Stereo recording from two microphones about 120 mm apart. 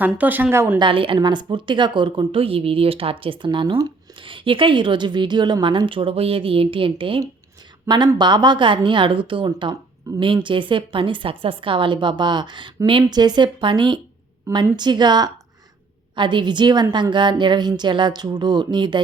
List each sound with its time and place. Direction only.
0.0 s speech: 15° right (ahead or behind)
0.8 s a woman's voice: 45° right (ahead or behind)